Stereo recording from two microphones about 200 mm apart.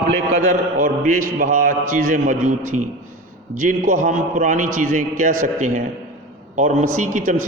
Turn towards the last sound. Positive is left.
turn(degrees=-40)  # may be behind; listen again after turning